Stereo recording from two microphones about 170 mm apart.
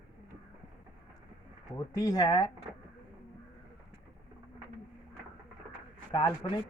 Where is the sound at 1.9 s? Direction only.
20° left (ahead or behind).